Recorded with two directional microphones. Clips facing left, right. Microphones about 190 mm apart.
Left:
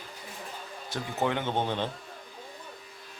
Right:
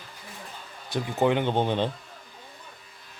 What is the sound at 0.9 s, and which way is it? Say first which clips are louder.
Speech: right 6 dB; 15° right (ahead or behind).